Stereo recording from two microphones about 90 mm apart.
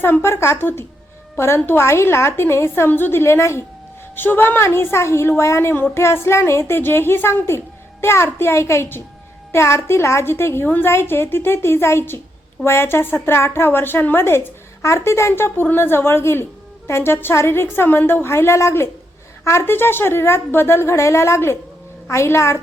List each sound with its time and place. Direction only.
0.0 s a woman's voice: 25° left (ahead or behind)